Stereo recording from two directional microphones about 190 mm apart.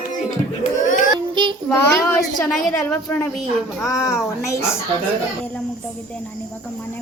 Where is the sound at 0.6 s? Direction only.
45° left (ahead or behind).